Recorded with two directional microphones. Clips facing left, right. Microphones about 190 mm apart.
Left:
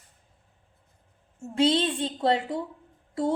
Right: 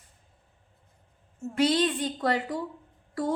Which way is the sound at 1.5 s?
25° left (ahead or behind).